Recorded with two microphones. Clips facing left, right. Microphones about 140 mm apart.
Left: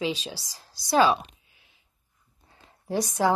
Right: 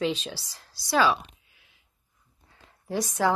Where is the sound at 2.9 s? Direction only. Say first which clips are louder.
Left 2 dB; 25° left (ahead or behind).